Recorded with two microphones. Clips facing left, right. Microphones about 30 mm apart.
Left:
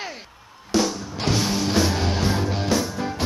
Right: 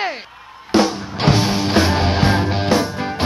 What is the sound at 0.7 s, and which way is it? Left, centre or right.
Music, right.